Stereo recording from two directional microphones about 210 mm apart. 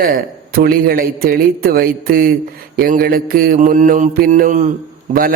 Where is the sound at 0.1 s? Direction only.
45° right (ahead or behind).